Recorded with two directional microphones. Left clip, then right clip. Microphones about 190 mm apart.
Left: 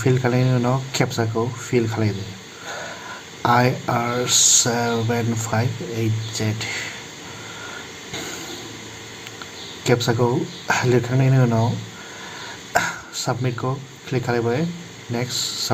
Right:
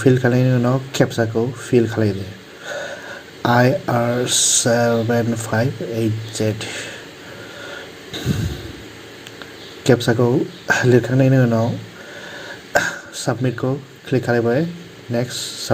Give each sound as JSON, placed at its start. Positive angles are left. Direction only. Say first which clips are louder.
{"t": 0.0, "sound": "speech", "louder": "right 4 dB", "side_deg": -15}
{"t": 2.6, "sound": "a sound", "louder": "right 4 dB", "side_deg": -15}
{"t": 3.4, "sound": "speech", "louder": "right 2 dB", "side_deg": -15}
{"t": 9.8, "sound": "a man's voice", "louder": "right 3 dB", "side_deg": -15}
{"t": 12.7, "sound": "a sound", "louder": "right 3 dB", "side_deg": -15}
{"t": 14.1, "sound": "speech", "louder": "right 4 dB", "side_deg": -15}